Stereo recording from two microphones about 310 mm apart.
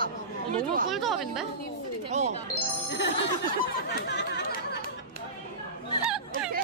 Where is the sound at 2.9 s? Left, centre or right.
Left.